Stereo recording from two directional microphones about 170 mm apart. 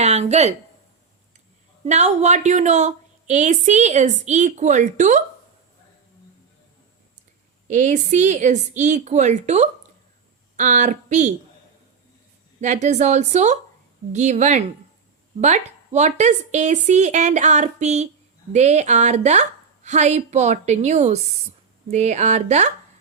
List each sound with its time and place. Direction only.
0.0 s a sound: 40° right (ahead or behind)
1.8 s a woman's voice: 40° right (ahead or behind)
7.7 s a woman's voice: 45° right (ahead or behind)
12.5 s a woman's voice: 45° right (ahead or behind)